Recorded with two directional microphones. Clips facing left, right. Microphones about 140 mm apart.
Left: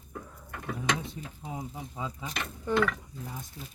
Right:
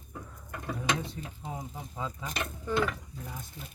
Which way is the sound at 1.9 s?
15° left (ahead or behind).